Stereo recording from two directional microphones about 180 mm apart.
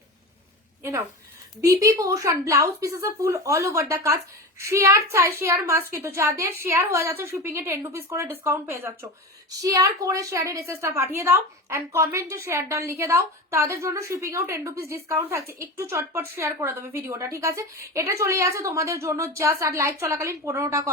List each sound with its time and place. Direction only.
0.8 s a woman's voice: 15° right (ahead or behind)